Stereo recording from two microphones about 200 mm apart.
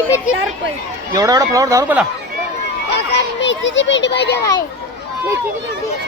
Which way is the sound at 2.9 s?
60° left (ahead or behind).